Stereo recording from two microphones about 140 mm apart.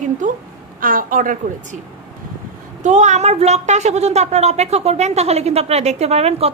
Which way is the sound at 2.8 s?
60° right (ahead or behind).